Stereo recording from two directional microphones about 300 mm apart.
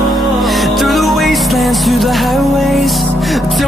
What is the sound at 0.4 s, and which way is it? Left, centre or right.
Music, centre.